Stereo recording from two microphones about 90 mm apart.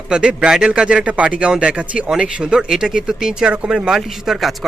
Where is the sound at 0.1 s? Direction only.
10° right (ahead or behind).